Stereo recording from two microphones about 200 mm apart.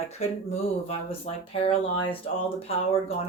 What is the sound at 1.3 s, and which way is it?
Speech, 35° left (ahead or behind).